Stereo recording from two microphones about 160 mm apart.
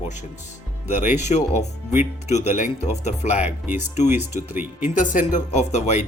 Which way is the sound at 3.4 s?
10° right (ahead or behind).